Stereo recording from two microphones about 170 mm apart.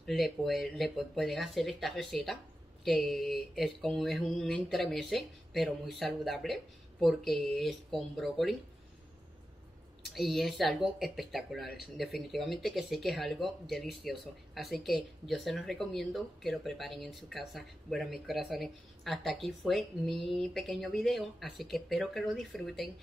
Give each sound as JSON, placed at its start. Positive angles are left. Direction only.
{"t": 0.0, "sound": "speech", "side_deg": 0}
{"t": 10.0, "sound": "speech", "side_deg": 0}